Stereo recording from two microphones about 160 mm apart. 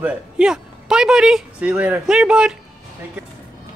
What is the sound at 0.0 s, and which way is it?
Speech, 5° right (ahead or behind).